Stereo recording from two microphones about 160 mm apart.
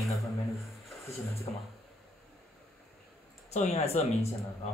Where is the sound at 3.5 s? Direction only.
40° left (ahead or behind).